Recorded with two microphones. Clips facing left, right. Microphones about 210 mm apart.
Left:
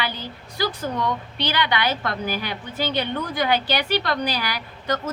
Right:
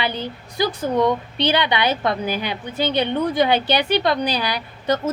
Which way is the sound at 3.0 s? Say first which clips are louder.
Right 9 dB; 20° right (ahead or behind).